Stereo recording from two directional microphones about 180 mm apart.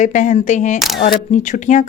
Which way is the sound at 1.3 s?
40° left (ahead or behind).